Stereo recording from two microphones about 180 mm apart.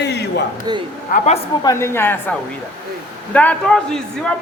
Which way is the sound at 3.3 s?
10° left (ahead or behind).